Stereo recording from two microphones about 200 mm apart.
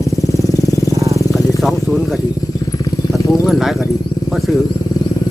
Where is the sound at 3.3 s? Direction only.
Centre (ahead or behind).